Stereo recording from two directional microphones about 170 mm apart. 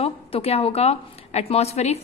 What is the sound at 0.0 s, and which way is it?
A woman's voice, 35° left (ahead or behind).